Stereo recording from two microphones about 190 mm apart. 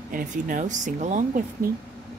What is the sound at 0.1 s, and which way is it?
Speech, 45° right (ahead or behind).